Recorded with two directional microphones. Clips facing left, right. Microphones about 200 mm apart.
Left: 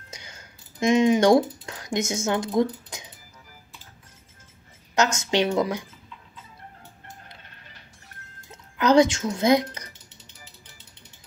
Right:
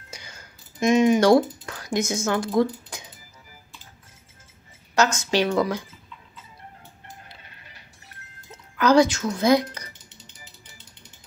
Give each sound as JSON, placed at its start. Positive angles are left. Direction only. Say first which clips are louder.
{"t": 0.1, "sound": "speech", "louder": "right 1 dB", "side_deg": 20}
{"t": 4.9, "sound": "speech", "louder": "right 1 dB", "side_deg": 20}
{"t": 8.7, "sound": "speech", "louder": "even", "side_deg": 20}